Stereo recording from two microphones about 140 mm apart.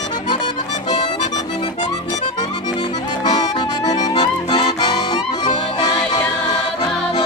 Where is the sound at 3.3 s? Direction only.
30° left (ahead or behind).